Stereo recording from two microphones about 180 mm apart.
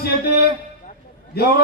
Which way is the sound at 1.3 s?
60° left (ahead or behind).